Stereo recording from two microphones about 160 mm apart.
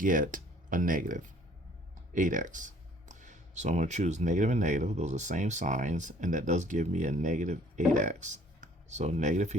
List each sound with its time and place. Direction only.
0.0 s speech: 60° right (ahead or behind)